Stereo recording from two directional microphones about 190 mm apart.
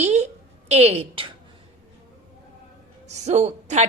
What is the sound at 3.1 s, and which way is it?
Speech, 35° right (ahead or behind).